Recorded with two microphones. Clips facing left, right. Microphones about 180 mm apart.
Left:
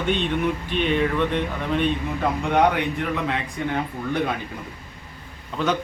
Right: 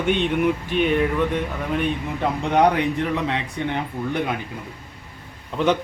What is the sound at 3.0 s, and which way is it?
Speech, 30° right (ahead or behind).